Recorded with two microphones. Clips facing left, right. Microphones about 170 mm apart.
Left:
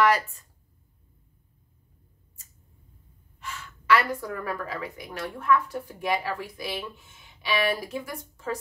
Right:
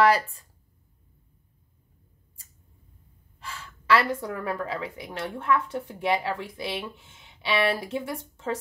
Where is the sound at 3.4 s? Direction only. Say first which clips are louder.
Left 1 dB; 30° right (ahead or behind).